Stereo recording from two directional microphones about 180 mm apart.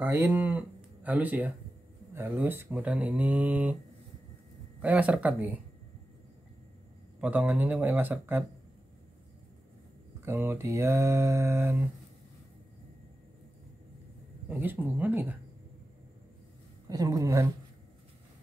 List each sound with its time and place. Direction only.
0.0 s speech: 10° right (ahead or behind)
4.8 s speech: 5° right (ahead or behind)
7.2 s speech: 10° right (ahead or behind)
10.2 s speech: 15° right (ahead or behind)
14.5 s speech: 10° right (ahead or behind)
16.9 s speech: 20° right (ahead or behind)